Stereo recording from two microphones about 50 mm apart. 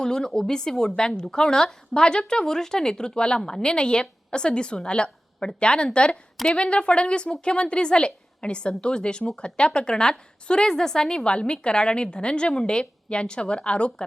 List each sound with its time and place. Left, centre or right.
0.0 s a woman's voice: centre